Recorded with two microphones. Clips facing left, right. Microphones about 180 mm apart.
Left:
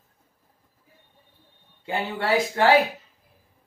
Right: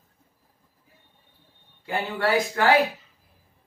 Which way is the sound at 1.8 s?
25° left (ahead or behind).